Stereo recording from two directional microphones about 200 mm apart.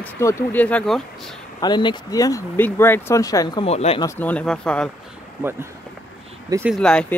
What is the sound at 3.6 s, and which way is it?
Speech, 30° left (ahead or behind).